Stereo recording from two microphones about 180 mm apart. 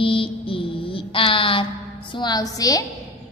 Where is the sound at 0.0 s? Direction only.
30° left (ahead or behind).